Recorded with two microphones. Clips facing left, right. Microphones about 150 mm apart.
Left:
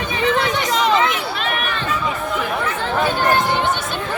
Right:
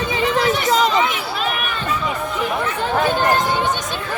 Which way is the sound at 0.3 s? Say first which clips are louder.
Right 2 dB; 35° right (ahead or behind).